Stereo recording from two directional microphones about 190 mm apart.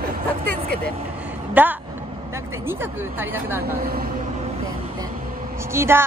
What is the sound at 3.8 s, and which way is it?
Speech, 50° right (ahead or behind).